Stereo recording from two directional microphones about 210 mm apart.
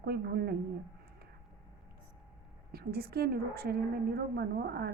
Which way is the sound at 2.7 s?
45° right (ahead or behind).